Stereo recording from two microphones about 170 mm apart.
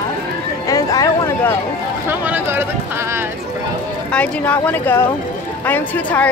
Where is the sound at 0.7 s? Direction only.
20° left (ahead or behind).